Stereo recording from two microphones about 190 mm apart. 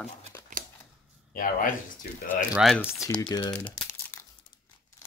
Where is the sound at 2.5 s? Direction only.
Centre (ahead or behind).